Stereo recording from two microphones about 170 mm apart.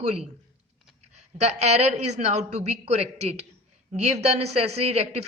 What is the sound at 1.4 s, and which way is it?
A woman's voice, 40° right (ahead or behind).